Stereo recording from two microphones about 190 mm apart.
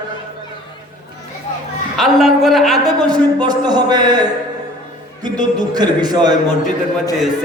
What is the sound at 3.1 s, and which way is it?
A man's voice, 20° right (ahead or behind).